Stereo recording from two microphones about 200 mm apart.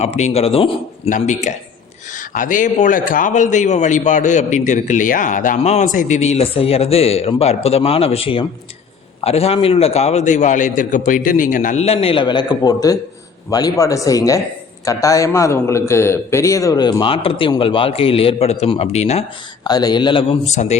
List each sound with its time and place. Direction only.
0.2 s a man's voice: 30° left (ahead or behind)
19.6 s a man's voice: 20° left (ahead or behind)